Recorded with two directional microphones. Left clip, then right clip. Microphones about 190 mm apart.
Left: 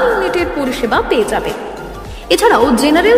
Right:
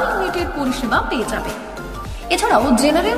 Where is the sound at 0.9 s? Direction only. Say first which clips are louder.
Left 6 dB; 15° left (ahead or behind).